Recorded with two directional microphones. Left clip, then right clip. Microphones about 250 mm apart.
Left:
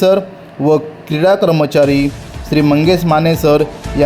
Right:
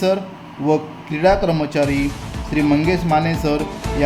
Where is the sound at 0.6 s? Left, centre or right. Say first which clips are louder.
Left 6 dB; left.